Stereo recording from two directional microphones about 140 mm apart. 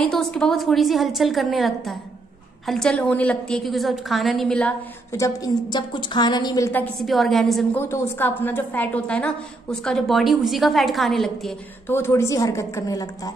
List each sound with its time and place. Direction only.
0.0 s a woman's voice: 5° left (ahead or behind)
5.1 s a woman's voice: 25° left (ahead or behind)
7.0 s a woman's voice: centre (ahead or behind)
7.7 s a woman's voice: 15° left (ahead or behind); by 11.5 s centre (ahead or behind)
11.9 s a woman's voice: 20° left (ahead or behind)